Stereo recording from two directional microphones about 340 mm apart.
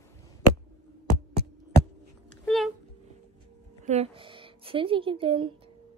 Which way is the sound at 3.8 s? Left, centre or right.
Centre.